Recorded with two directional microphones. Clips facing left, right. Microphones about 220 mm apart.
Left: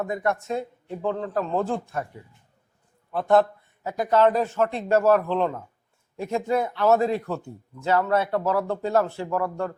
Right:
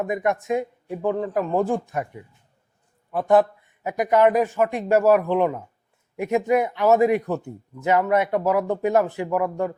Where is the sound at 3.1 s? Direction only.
10° right (ahead or behind).